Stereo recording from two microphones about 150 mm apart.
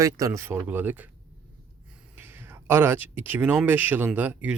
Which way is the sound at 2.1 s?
15° right (ahead or behind).